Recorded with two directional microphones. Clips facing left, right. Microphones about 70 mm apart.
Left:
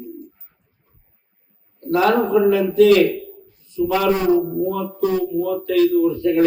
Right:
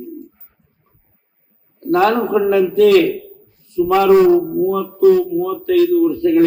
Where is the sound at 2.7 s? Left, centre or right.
Right.